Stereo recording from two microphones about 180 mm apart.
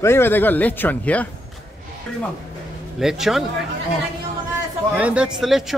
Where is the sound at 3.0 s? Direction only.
Centre (ahead or behind).